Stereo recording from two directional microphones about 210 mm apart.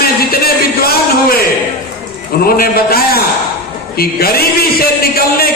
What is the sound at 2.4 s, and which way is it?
A man's voice, 45° left (ahead or behind).